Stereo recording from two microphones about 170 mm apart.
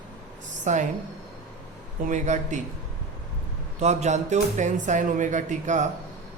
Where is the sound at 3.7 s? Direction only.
40° right (ahead or behind).